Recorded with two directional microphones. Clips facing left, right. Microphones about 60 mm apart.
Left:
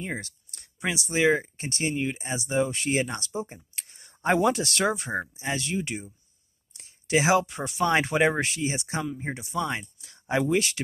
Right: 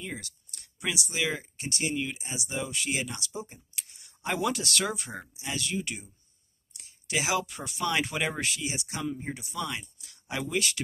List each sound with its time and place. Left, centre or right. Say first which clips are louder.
0.0 s speech: left 5 dB; left